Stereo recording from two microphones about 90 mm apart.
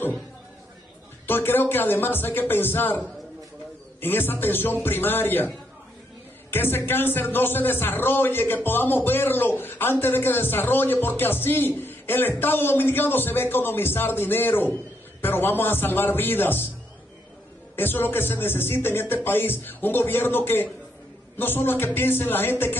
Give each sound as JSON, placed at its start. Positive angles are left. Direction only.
{"t": 1.2, "sound": "a man's voice", "side_deg": 25}
{"t": 4.0, "sound": "a man's voice", "side_deg": 25}
{"t": 6.5, "sound": "a man's voice", "side_deg": 25}
{"t": 17.7, "sound": "a man's voice", "side_deg": 20}